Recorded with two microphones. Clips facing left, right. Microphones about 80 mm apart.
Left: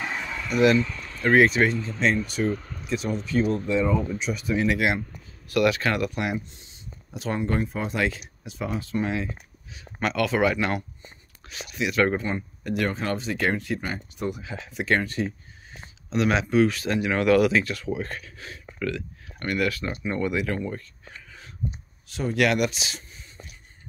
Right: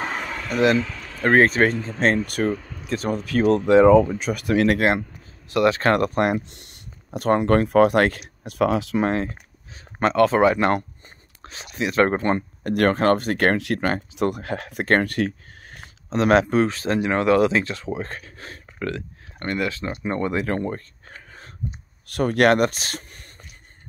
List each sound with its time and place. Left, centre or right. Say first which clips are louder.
0.0 s a sound: right 3 dB; right
0.7 s a sound: even; right
1.2 s speech: right 2 dB; right
4.2 s speech: right 5 dB; right
5.5 s speech: right 3 dB; right
5.8 s speech: right 7 dB; right
6.4 s speech: right 1 dB; right
9.0 s speech: right 6 dB; right
12.2 s speech: right 7 dB; right
16.1 s speech: right 6 dB; right
22.0 s speech: right 6 dB; right